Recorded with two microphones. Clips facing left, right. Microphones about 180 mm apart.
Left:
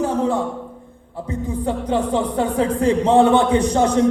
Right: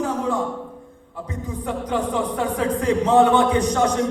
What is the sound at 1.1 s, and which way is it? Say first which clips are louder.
A man's voice: left 5 dB; 30° left (ahead or behind).